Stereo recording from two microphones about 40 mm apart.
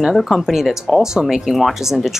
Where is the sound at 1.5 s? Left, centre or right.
Centre.